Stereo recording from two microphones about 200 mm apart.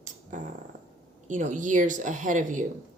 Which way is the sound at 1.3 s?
40° right (ahead or behind).